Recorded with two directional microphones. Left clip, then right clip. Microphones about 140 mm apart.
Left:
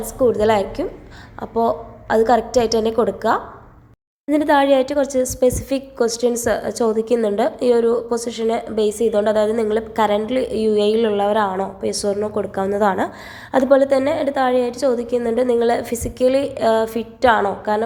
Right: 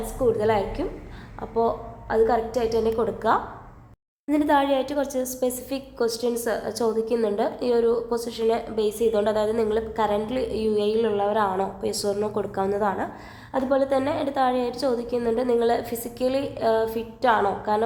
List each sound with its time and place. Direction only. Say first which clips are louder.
0.0 s a woman's voice: left 6 dB; 30° left (ahead or behind)
3.2 s a woman's voice: left 3 dB; 20° left (ahead or behind)
13.8 s a woman's voice: left 7 dB; 20° left (ahead or behind)